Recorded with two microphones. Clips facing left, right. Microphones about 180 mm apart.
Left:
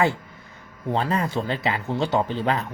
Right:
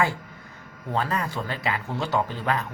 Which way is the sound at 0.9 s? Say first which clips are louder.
Left 3 dB; 25° left (ahead or behind).